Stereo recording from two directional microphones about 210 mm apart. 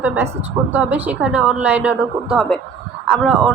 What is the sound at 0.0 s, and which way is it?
A woman's voice, 10° right (ahead or behind).